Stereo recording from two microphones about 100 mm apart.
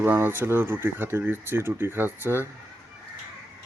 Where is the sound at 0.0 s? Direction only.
20° right (ahead or behind).